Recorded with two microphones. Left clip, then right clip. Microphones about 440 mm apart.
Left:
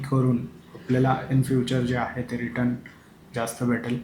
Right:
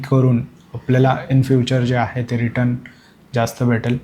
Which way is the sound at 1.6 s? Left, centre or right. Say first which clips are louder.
Right 7 dB; right.